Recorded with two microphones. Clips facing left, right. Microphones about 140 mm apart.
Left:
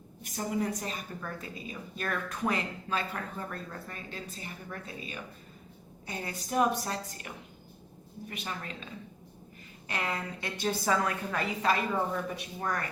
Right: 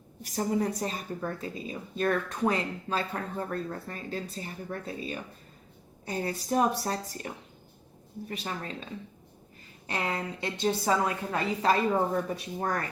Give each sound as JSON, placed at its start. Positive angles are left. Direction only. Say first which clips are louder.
{"t": 0.2, "sound": "a woman's voice", "louder": "right 4 dB", "side_deg": -35}